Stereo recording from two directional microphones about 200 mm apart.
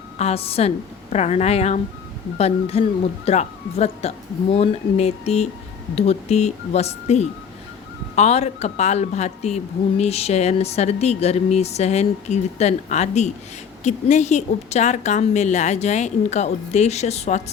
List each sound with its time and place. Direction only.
0.2 s a woman's voice: 30° left (ahead or behind)